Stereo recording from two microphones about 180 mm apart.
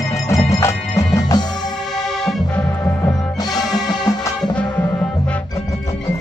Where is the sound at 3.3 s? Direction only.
20° left (ahead or behind).